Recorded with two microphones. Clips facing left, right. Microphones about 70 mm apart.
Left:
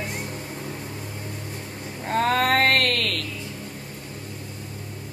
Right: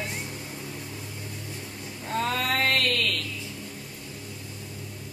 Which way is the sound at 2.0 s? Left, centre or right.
Left.